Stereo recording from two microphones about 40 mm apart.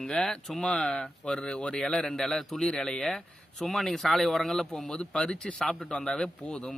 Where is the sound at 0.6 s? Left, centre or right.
Left; by 2.7 s centre.